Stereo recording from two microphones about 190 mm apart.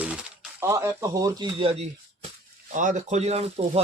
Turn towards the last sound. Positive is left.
turn(degrees=-35)  # may be behind; listen again after turning